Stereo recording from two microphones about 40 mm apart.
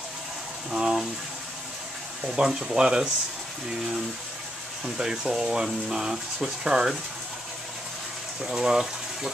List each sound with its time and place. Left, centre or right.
0.7 s speech: centre
2.4 s speech: centre
8.4 s speech: centre